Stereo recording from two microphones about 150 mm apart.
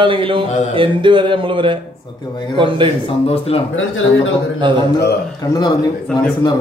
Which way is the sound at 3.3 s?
40° left (ahead or behind).